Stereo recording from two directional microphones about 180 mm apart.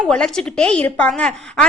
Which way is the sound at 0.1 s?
5° left (ahead or behind).